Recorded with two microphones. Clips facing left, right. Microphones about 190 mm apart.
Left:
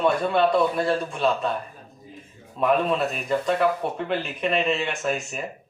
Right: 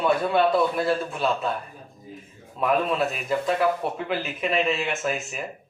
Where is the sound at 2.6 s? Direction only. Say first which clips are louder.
Left 1 dB; centre (ahead or behind).